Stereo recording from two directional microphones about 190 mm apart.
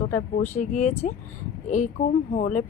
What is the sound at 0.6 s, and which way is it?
Speech, 40° left (ahead or behind).